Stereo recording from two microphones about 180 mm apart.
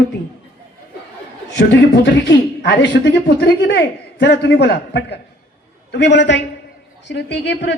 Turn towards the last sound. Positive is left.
turn(degrees=70)  # may be behind; listen again after turning